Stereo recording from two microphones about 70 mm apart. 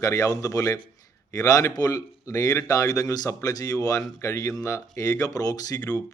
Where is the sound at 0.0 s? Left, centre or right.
Left.